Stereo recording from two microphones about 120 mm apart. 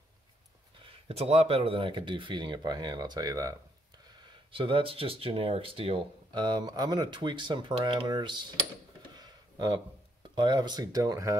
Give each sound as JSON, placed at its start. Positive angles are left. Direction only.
{"t": 0.8, "sound": "speech", "side_deg": -55}
{"t": 4.3, "sound": "speech", "side_deg": -45}
{"t": 9.1, "sound": "a sound", "side_deg": -35}
{"t": 10.3, "sound": "speech", "side_deg": -40}